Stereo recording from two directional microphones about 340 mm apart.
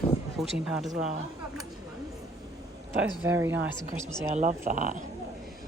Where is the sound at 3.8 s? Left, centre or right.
Right.